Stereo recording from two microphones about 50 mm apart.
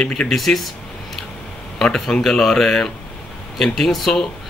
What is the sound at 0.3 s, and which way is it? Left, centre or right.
Speech, centre.